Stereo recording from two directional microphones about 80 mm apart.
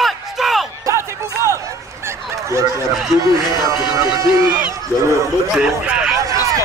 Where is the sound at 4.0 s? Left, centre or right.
Right.